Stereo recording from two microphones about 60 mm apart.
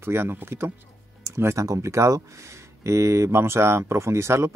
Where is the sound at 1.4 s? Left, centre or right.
Right.